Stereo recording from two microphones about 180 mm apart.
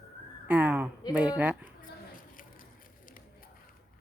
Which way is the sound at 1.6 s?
50° left (ahead or behind).